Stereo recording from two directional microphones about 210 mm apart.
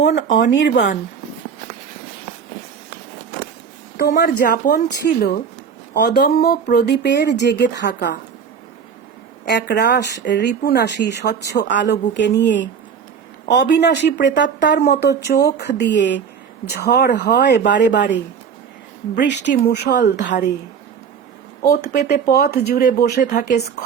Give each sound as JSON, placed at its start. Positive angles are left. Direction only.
{"t": 0.0, "sound": "speech", "side_deg": 55}
{"t": 3.9, "sound": "speech", "side_deg": 45}
{"t": 5.9, "sound": "speech", "side_deg": 50}
{"t": 9.5, "sound": "speech", "side_deg": 55}
{"t": 19.1, "sound": "speech", "side_deg": 55}
{"t": 21.7, "sound": "speech", "side_deg": 50}